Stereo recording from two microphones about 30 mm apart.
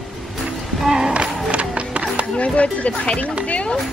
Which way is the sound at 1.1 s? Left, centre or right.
Right.